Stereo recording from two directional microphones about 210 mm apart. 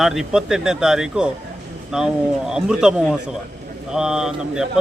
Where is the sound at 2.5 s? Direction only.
5° right (ahead or behind).